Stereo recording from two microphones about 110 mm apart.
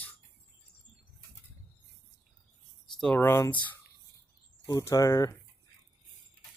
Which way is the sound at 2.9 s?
5° left (ahead or behind).